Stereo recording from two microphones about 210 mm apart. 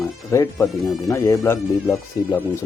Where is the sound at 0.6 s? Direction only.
Centre (ahead or behind).